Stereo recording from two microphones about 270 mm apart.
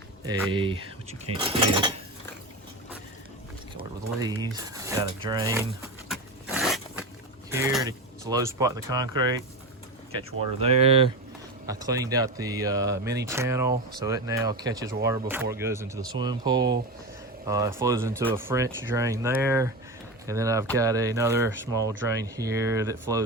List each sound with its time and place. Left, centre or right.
0.3 s speech: centre
4.2 s speech: centre
6.1 s zipper: centre
7.5 s speech: centre
10.6 s speech: right